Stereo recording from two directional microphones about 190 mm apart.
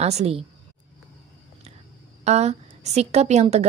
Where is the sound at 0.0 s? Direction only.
35° right (ahead or behind).